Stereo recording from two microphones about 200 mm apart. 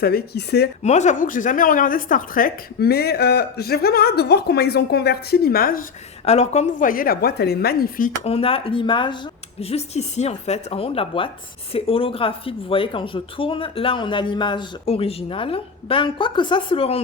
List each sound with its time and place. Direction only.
0.0 s speech: 50° left (ahead or behind)
0.8 s speech: 35° left (ahead or behind)
6.2 s speech: 35° left (ahead or behind)
8.2 s speech: 30° left (ahead or behind)